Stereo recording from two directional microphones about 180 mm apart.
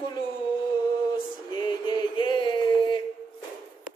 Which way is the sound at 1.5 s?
25° left (ahead or behind).